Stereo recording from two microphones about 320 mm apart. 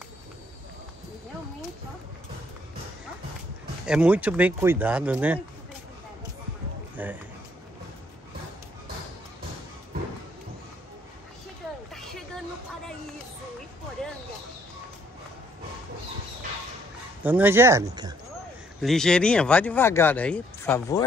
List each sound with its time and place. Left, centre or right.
3.8 s speech: centre
7.0 s speech: centre
14.0 s a sound: centre
17.2 s speech: centre
18.8 s speech: centre